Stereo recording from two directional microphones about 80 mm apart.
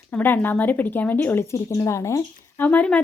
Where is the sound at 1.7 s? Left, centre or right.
Left.